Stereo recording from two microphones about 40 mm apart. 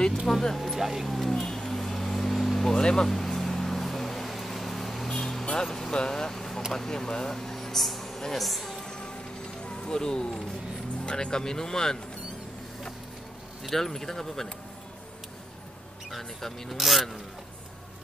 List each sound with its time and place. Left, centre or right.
0.3 s speech: centre
0.6 s vehicle: centre
2.8 s speech: centre
3.3 s vehicle: centre
5.4 s vehicle: centre
5.7 s speech: centre
8.8 s music: centre
11.1 s speech: left
13.7 s speech: centre
16.1 s speech: centre